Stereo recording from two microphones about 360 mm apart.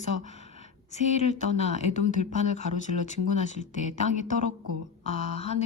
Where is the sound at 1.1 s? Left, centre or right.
Centre.